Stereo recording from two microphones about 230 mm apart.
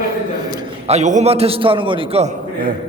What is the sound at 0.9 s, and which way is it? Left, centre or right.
A man's voice, right.